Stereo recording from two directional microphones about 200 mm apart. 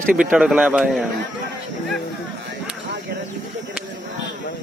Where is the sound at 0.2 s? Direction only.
5° right (ahead or behind).